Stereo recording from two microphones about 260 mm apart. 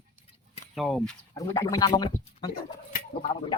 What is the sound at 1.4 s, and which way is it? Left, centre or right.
Speech, centre.